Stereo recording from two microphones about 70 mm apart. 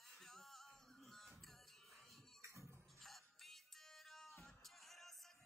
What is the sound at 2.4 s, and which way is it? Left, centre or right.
Music, right.